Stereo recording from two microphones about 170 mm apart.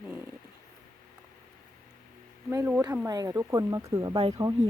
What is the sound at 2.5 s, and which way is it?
Speech, 10° right (ahead or behind).